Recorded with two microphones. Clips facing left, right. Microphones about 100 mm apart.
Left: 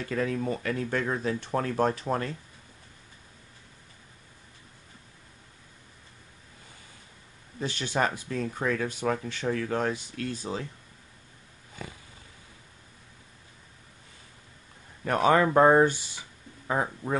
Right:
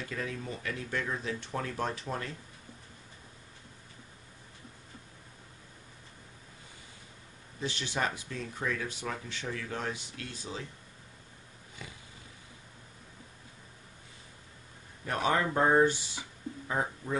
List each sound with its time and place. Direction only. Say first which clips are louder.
0.1 s speech: left 11 dB; 55° left (ahead or behind)
7.6 s speech: left 5 dB; 50° left (ahead or behind)
11.8 s a sound: left 6 dB; 45° left (ahead or behind)
15.0 s speech: left 7 dB; 65° left (ahead or behind)